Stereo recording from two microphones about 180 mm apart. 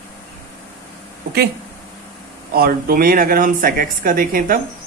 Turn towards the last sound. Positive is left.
turn(degrees=-55)  # may be behind; listen again after turning